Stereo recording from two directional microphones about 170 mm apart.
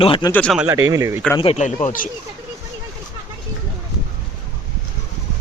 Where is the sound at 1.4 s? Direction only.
40° left (ahead or behind).